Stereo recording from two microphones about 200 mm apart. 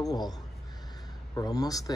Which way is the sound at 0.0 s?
20° left (ahead or behind).